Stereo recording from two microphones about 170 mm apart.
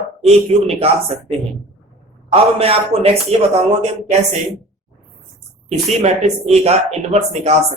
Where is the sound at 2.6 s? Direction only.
35° right (ahead or behind).